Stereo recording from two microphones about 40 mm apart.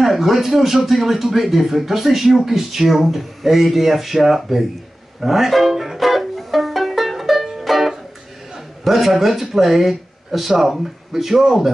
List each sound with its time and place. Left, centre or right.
0.0 s speech: centre
5.2 s music: centre
8.8 s speech: centre